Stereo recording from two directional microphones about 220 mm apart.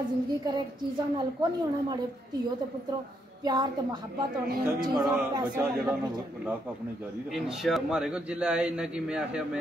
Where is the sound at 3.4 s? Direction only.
20° right (ahead or behind).